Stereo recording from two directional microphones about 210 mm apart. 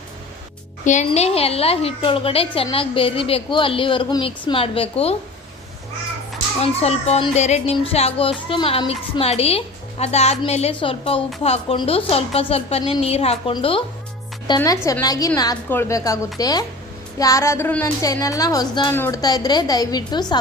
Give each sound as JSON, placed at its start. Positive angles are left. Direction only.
{"t": 0.9, "sound": "speech", "side_deg": 35}
{"t": 6.6, "sound": "a woman's voice", "side_deg": 30}